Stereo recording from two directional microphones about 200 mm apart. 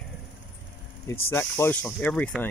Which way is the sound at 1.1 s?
10° left (ahead or behind).